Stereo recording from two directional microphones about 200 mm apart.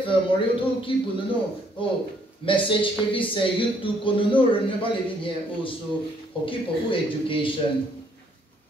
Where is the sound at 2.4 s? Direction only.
25° left (ahead or behind).